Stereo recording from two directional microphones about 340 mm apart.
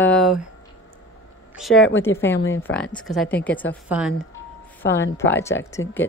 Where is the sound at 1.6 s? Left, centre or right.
Centre.